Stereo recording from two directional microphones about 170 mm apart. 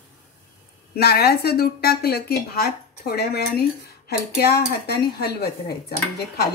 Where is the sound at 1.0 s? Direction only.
70° left (ahead or behind).